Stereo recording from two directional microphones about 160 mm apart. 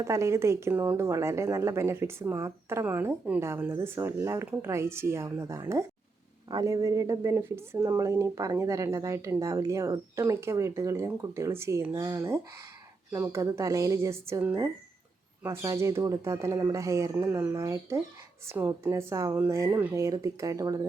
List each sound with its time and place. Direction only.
0.0 s a woman's voice: 20° right (ahead or behind)